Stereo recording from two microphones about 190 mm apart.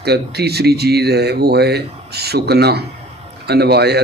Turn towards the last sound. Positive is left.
turn(degrees=-60)  # may be behind; listen again after turning